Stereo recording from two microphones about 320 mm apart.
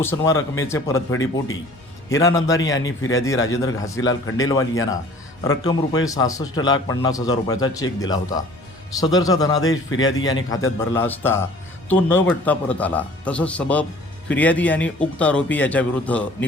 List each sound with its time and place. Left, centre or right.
0.0 s a man's voice: centre
2.5 s a man's voice: left
3.2 s a man's voice: centre
10.1 s a man's voice: left
10.8 s a man's voice: centre